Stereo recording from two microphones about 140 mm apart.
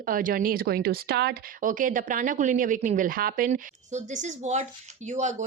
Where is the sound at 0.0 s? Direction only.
80° right.